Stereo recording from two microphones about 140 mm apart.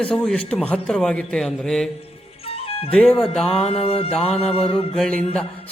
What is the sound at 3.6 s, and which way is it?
Mantra, 45° left (ahead or behind).